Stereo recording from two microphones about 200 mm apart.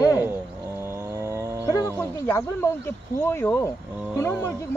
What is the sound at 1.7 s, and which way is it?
Speech, 15° left (ahead or behind).